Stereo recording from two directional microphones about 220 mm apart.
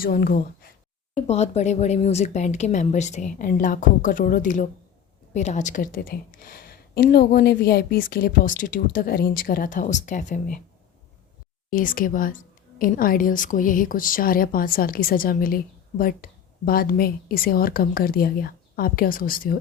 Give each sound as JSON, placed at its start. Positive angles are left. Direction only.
{"t": 0.0, "sound": "a woman's voice", "side_deg": 40}
{"t": 1.1, "sound": "a woman's voice", "side_deg": 30}
{"t": 11.7, "sound": "a woman's voice", "side_deg": 35}